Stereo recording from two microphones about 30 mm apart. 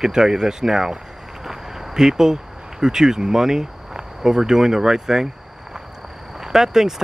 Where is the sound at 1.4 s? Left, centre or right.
Centre.